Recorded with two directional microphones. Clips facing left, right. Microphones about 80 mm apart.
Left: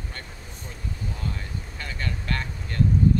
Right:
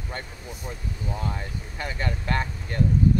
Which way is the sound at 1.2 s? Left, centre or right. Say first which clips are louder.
Right 2 dB; right.